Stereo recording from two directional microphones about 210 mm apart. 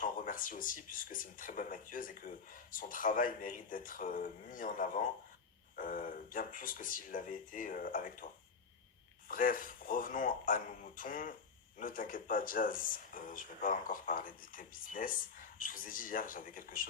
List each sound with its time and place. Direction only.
0.0 s speech: 40° left (ahead or behind)
9.3 s speech: 40° left (ahead or behind)